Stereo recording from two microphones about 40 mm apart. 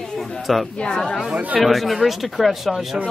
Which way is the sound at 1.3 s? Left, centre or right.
Right.